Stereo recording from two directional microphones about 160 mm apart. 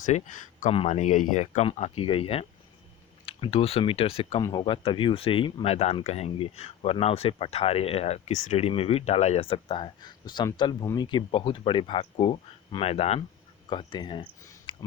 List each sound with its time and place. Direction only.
0.0 s speech: 50° left (ahead or behind)
1.6 s speech: 35° left (ahead or behind)
14.4 s a sound: 20° left (ahead or behind)